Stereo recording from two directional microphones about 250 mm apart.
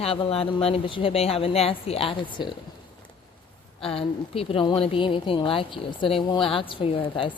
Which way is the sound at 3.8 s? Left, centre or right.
Left.